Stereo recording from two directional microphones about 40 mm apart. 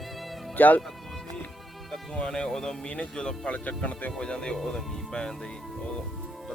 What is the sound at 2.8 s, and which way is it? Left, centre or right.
Speech, left.